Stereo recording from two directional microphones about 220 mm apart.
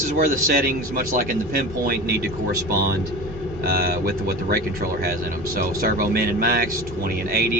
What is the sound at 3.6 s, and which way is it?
Speech, 45° right (ahead or behind).